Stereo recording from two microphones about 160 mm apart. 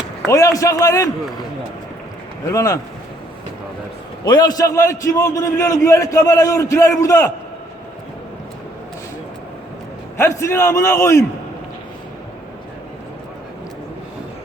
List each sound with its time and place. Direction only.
0.3 s a man's voice: 20° left (ahead or behind)
2.5 s a man's voice: 20° left (ahead or behind)
4.2 s a man's voice: 25° left (ahead or behind)
10.2 s a man's voice: 15° left (ahead or behind)